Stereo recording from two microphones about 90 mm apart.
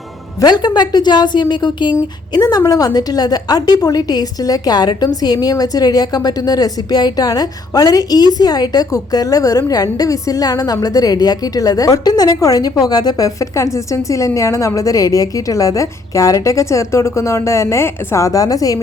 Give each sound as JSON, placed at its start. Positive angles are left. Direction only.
{"t": 0.4, "sound": "a woman's voice", "side_deg": 50}
{"t": 2.3, "sound": "a woman's voice", "side_deg": 45}